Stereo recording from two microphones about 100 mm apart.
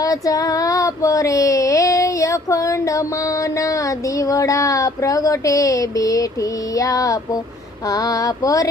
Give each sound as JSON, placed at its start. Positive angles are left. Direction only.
{"t": 0.0, "sound": "child singing", "side_deg": 35}
{"t": 4.2, "sound": "child singing", "side_deg": 35}